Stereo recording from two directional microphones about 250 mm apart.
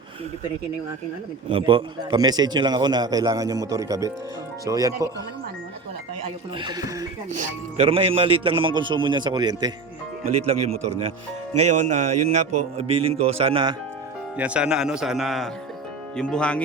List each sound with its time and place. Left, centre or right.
1.5 s a man's voice: centre
6.6 s a man's voice: centre
7.3 s a man's voice: right
10.3 s speech: right
11.5 s speech: right
11.9 s speech: right
14.3 s a man's voice: centre